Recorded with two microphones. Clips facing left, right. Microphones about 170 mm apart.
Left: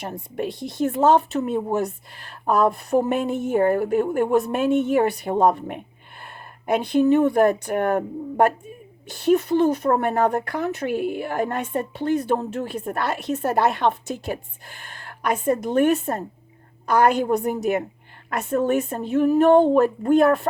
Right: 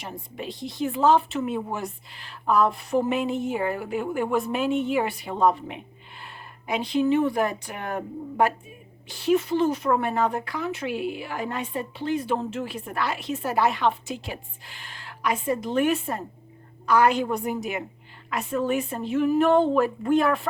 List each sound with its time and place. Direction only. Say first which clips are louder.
0.9 s speech: left 3 dB; 45° left (ahead or behind)
2.2 s a woman's voice: left 2 dB; 50° left (ahead or behind)